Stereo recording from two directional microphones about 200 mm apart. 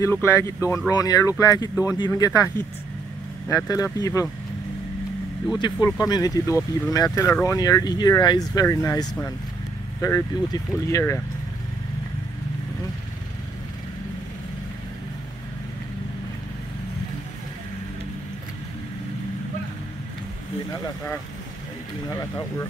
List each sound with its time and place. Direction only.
0.0 s speech: 15° left (ahead or behind)
5.6 s speech: 20° left (ahead or behind)